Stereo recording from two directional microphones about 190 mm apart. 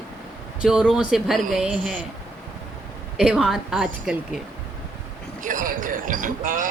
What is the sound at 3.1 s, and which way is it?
Speech, 5° right (ahead or behind).